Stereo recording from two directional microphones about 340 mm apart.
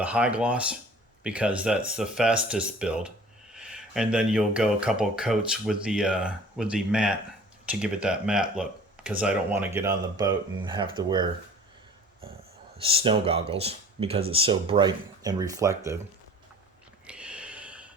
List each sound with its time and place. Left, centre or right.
0.0 s speech: centre
12.8 s speech: centre
17.1 s a sound: centre